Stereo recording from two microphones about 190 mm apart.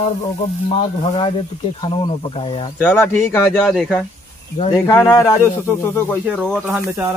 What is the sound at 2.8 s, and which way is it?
Speech, 10° left (ahead or behind).